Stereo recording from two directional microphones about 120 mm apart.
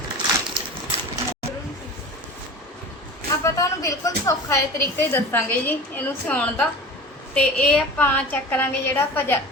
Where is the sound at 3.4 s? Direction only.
30° left (ahead or behind).